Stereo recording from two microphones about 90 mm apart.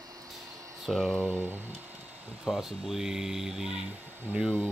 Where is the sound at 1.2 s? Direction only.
20° left (ahead or behind).